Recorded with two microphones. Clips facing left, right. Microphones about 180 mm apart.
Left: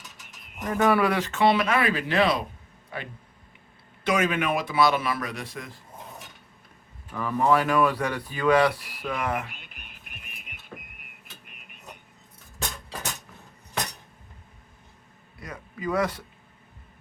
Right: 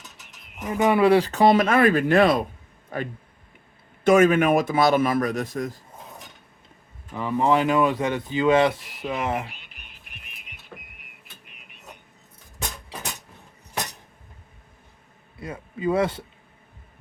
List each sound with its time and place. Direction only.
0.8 s speech: 20° right (ahead or behind); by 5.7 s 45° right (ahead or behind)
7.1 s speech: 20° right (ahead or behind)
9.8 s music: 50° left (ahead or behind)
15.4 s speech: 25° right (ahead or behind)